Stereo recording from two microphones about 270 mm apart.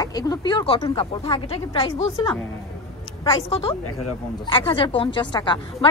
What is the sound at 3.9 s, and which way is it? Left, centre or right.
Speech, left.